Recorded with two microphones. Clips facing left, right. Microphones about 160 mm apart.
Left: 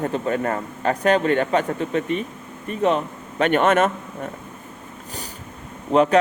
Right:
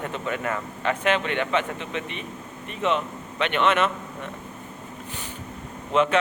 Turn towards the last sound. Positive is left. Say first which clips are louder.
# left 5 dB
turn(degrees=40)  # may be behind; listen again after turning